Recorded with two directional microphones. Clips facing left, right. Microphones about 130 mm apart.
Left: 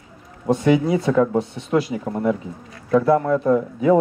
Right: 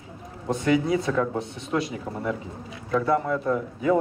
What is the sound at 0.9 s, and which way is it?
Speech, 25° left (ahead or behind).